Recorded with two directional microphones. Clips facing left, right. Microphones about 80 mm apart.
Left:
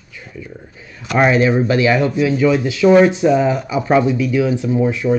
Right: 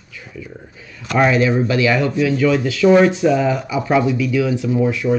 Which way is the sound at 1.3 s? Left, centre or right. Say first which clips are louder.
Left 2 dB; left.